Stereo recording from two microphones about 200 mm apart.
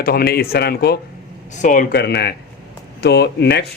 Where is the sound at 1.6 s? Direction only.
40° left (ahead or behind).